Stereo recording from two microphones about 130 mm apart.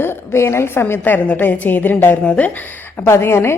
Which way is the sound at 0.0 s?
20° left (ahead or behind).